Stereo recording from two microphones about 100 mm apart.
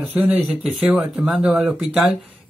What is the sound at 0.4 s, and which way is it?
A man's voice, 5° right (ahead or behind).